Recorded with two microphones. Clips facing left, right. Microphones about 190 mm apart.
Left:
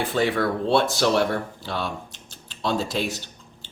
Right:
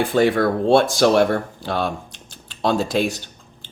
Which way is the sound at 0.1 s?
45° right (ahead or behind).